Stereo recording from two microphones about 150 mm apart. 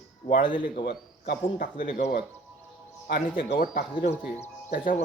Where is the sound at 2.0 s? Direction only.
65° left (ahead or behind).